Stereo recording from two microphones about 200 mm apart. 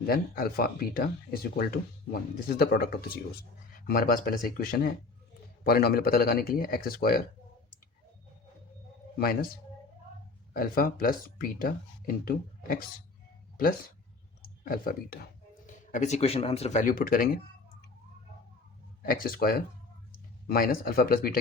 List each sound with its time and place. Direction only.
0.0 s speech: 45° left (ahead or behind)
9.1 s speech: 50° left (ahead or behind)
10.5 s speech: 45° left (ahead or behind)
14.4 s speech: 45° left (ahead or behind)
19.0 s speech: 45° left (ahead or behind)